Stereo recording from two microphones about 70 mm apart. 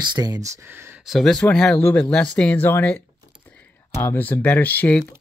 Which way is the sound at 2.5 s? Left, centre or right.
Left.